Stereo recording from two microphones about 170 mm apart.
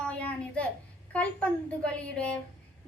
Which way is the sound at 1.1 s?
5° left (ahead or behind).